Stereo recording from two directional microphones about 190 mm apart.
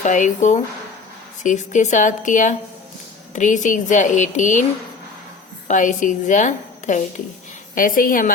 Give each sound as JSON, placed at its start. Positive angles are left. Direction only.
{"t": 0.0, "sound": "a woman's voice", "side_deg": 40}
{"t": 5.6, "sound": "a woman's voice", "side_deg": 40}